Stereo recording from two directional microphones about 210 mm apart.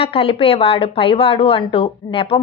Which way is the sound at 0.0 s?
30° left (ahead or behind).